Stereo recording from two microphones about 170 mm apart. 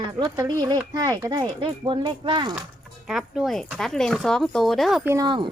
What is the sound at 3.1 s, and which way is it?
Speech, 5° right (ahead or behind).